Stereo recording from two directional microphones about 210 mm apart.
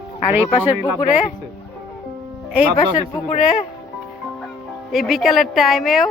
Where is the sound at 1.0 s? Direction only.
35° left (ahead or behind).